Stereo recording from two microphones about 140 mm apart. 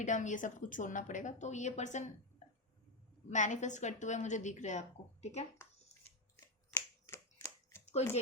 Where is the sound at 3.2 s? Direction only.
60° left (ahead or behind).